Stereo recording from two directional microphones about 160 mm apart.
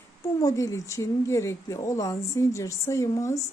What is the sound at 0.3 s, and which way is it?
Speech, 20° left (ahead or behind).